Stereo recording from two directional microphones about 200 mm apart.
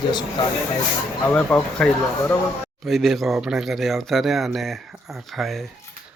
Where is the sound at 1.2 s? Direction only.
5° left (ahead or behind).